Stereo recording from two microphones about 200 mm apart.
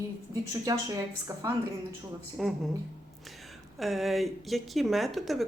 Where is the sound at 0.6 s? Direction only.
15° right (ahead or behind).